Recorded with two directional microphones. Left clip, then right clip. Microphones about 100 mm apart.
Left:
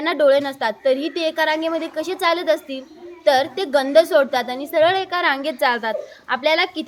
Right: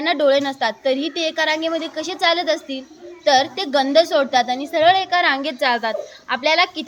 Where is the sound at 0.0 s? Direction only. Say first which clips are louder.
Left 1 dB; 40° left (ahead or behind).